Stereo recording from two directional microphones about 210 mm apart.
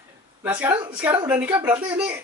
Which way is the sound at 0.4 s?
10° right (ahead or behind).